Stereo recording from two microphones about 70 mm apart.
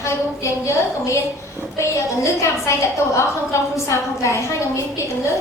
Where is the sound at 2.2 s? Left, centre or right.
Left.